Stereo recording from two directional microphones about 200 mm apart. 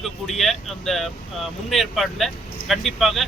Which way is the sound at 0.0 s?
Centre (ahead or behind).